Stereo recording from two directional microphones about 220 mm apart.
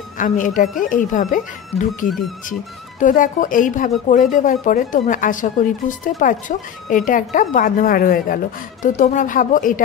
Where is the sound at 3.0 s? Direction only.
35° left (ahead or behind).